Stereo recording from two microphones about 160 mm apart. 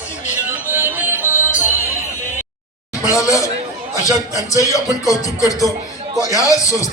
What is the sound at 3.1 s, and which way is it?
Speech, 20° left (ahead or behind).